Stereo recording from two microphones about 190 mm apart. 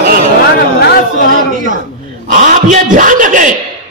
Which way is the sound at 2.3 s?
45° right (ahead or behind).